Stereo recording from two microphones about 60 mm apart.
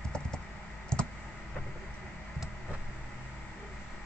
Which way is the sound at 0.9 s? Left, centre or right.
Centre.